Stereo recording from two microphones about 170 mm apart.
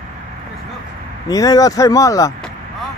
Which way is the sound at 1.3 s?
20° left (ahead or behind).